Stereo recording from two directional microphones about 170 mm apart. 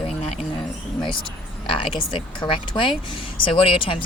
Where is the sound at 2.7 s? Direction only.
30° left (ahead or behind).